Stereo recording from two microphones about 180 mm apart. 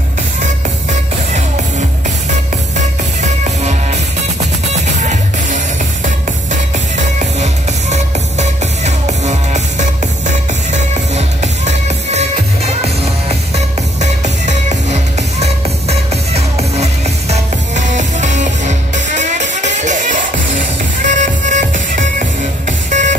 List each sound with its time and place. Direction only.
3.2 s music: 40° right (ahead or behind)
7.9 s music: 40° right (ahead or behind)